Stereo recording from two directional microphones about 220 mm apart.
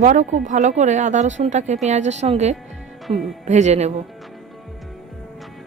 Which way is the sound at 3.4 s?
30° right (ahead or behind).